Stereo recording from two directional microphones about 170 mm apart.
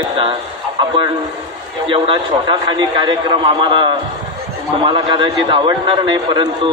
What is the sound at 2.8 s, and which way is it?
A man's voice, 30° right (ahead or behind).